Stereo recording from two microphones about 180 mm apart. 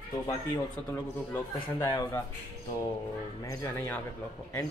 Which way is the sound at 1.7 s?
15° left (ahead or behind).